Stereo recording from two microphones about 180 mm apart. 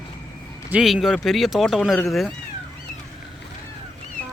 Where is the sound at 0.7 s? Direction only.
5° right (ahead or behind).